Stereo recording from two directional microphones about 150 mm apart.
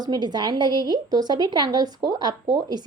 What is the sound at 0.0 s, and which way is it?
A woman's voice, 25° right (ahead or behind).